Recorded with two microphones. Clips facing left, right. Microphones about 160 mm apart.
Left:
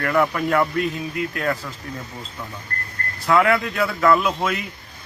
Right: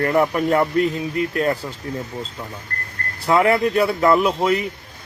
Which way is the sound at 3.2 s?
25° right (ahead or behind).